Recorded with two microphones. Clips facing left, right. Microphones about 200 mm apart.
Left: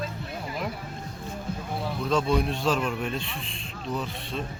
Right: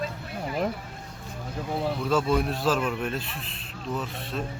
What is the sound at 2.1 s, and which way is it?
A man's voice, 5° right (ahead or behind).